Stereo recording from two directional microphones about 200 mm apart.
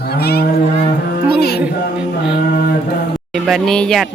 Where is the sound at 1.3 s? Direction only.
55° left (ahead or behind).